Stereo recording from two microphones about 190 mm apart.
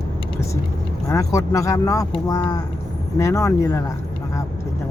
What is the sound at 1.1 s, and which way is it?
Speech, 15° left (ahead or behind).